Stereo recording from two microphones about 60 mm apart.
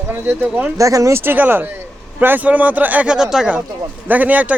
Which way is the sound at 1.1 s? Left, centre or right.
Right.